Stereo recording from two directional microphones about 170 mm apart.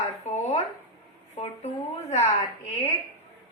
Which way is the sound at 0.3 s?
40° left (ahead or behind).